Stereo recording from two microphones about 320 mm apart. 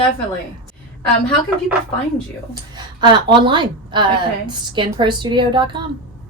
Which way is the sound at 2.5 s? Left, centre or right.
Centre.